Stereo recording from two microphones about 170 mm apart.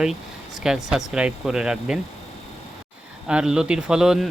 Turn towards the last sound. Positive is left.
turn(degrees=-5)  # may be behind; listen again after turning